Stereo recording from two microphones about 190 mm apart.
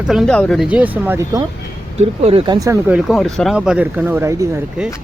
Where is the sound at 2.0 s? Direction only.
30° right (ahead or behind).